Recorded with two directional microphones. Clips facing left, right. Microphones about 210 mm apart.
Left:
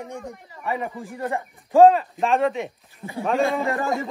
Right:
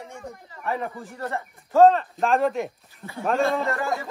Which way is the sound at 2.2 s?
Centre (ahead or behind).